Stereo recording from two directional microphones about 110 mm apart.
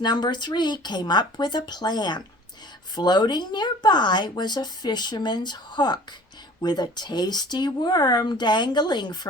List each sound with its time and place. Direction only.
0.0 s speech: 40° left (ahead or behind)